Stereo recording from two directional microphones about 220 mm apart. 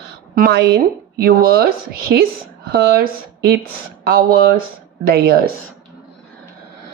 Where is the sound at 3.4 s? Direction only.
45° right (ahead or behind).